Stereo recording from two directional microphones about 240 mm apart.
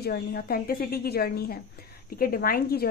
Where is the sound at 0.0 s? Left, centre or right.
Left.